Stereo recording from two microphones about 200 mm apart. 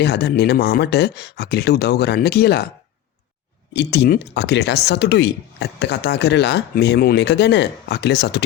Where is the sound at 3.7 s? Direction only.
55° left (ahead or behind).